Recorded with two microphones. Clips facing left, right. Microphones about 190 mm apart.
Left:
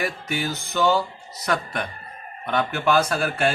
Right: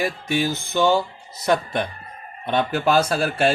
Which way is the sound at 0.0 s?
30° right (ahead or behind).